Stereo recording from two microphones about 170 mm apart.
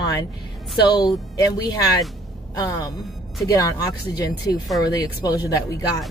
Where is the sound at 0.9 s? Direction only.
25° left (ahead or behind).